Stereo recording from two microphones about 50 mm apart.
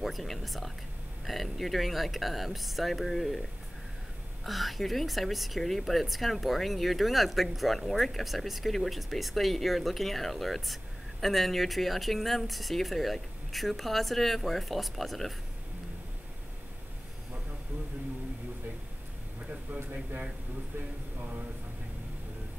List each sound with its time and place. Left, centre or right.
0.0 s speech: centre
4.5 s speech: centre
19.7 s speech: right